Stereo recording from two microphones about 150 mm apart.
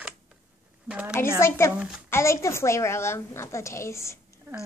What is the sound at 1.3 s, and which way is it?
A woman's voice, 15° left (ahead or behind).